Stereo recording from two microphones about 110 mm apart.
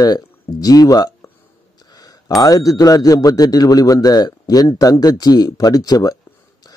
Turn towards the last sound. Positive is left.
turn(degrees=35)  # may be behind; listen again after turning